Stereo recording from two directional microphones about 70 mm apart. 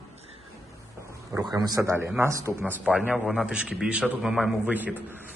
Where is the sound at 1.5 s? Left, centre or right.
Right.